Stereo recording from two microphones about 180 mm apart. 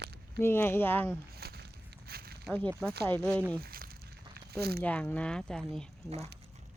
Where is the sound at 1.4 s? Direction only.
60° right (ahead or behind).